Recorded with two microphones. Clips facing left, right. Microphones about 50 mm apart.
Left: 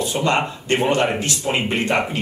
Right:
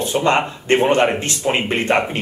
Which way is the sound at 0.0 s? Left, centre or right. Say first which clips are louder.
Right 3 dB; right.